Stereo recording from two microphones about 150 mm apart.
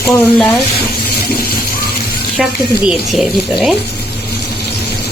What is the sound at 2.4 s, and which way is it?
Speech, centre (ahead or behind).